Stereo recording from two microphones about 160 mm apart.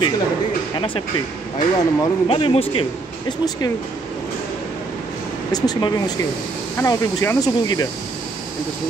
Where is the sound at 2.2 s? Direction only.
35° left (ahead or behind).